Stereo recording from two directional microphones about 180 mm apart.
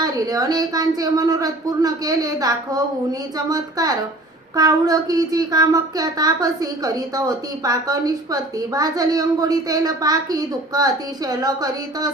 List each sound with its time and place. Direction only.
0.0 s speech: 20° right (ahead or behind)